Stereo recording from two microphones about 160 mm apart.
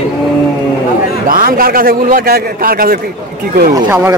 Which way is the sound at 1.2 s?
65° right (ahead or behind).